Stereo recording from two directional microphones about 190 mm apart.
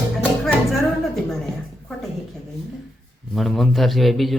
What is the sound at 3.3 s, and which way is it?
Speech, centre (ahead or behind).